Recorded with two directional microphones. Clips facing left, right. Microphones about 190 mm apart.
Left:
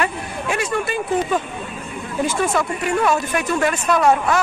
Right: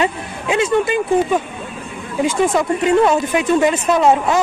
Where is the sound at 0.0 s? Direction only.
20° right (ahead or behind).